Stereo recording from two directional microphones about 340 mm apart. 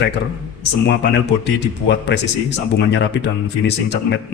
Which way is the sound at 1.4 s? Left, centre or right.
Left.